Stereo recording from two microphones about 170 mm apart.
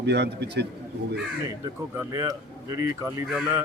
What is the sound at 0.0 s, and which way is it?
Speech, 80° right.